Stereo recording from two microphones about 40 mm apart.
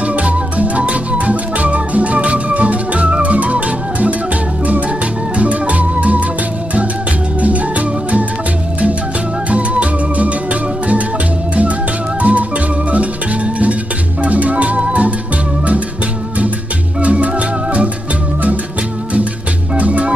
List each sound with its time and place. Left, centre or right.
0.0 s music: right
5.4 s music: right
7.3 s music: right
9.5 s music: right
12.2 s music: right
14.2 s music: right
17.0 s music: right
19.7 s music: right